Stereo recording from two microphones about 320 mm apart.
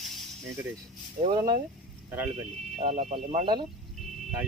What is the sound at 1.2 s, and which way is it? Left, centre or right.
Speech, centre.